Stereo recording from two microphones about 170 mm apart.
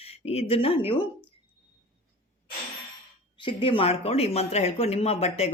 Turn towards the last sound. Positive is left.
turn(degrees=40)  # may be behind; listen again after turning